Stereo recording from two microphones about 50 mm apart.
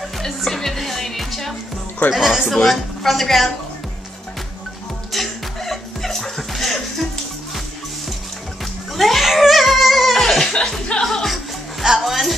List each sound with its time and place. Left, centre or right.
0.2 s music: centre
2.0 s speech: centre
5.1 s music: centre
8.9 s a sound: centre
10.5 s speech: centre